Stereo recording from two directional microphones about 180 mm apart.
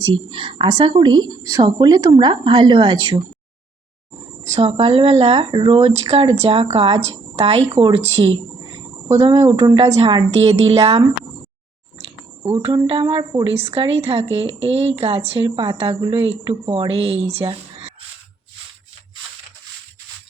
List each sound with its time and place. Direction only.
0.3 s a woman's voice: 30° right (ahead or behind)
4.5 s a woman's voice: 35° right (ahead or behind)
9.8 s speech: 35° right (ahead or behind)
12.6 s speech: 30° right (ahead or behind)